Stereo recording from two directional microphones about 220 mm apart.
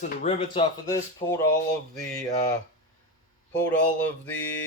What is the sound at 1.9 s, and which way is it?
Speech, centre (ahead or behind).